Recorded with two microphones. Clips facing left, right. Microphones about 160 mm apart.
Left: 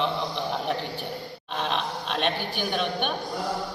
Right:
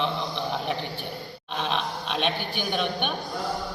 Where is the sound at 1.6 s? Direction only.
Centre (ahead or behind).